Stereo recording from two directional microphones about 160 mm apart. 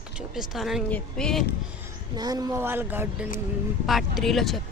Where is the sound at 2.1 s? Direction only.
25° right (ahead or behind).